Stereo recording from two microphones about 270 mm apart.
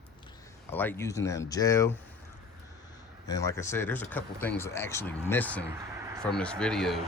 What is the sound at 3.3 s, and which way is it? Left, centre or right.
Speech, centre.